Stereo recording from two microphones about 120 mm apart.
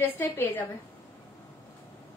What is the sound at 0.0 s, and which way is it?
Speech, 20° left (ahead or behind).